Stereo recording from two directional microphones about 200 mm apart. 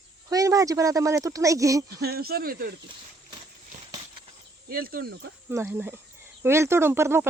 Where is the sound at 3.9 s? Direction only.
25° right (ahead or behind).